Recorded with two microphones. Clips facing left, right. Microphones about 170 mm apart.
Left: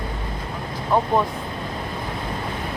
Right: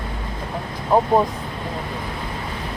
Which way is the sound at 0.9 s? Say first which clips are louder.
Right 3 dB; 35° right (ahead or behind).